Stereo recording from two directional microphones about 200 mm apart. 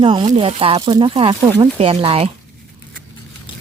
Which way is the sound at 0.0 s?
25° right (ahead or behind).